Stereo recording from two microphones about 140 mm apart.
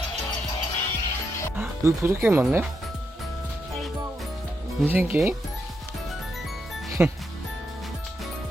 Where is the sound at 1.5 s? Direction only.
20° right (ahead or behind).